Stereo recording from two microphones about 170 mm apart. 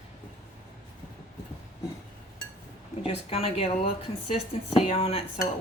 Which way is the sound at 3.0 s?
35° left (ahead or behind).